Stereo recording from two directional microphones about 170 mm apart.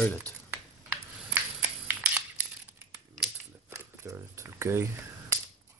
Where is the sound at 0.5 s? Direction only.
10° right (ahead or behind).